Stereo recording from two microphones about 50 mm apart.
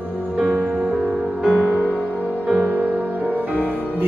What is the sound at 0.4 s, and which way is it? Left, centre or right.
Music, right.